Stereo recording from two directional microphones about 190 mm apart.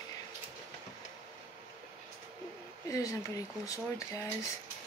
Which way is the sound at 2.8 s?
15° left (ahead or behind).